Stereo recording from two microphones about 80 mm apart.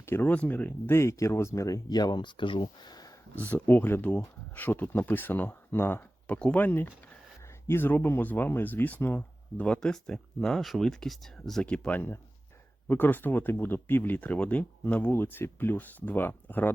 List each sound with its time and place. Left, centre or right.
0.0 s speech: left
0.3 s speech: left
0.9 s speech: left
1.9 s speech: left
3.3 s speech: left; by 11.6 s centre
11.6 s speech: centre